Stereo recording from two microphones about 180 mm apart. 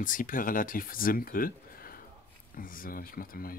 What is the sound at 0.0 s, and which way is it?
Speech, 50° left (ahead or behind).